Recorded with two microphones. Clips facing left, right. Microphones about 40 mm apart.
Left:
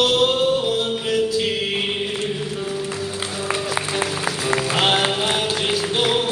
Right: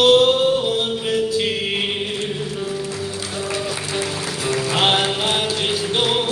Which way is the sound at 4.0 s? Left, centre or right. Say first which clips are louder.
Left 1 dB; left.